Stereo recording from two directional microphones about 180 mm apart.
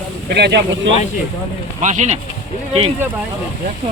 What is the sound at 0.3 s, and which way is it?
Speech, 65° right (ahead or behind).